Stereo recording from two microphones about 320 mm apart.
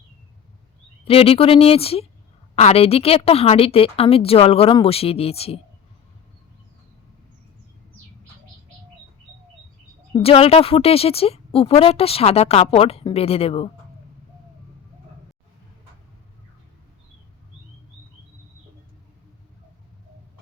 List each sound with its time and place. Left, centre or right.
1.0 s speech: centre
10.2 s speech: centre